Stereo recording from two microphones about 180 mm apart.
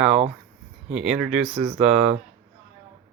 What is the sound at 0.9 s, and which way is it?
Speech, 5° right (ahead or behind).